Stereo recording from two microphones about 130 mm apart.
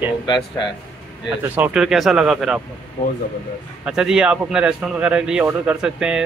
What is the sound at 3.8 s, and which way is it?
A man's voice, 5° right (ahead or behind).